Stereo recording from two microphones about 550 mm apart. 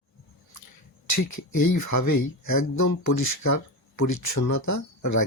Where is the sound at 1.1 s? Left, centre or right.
Left.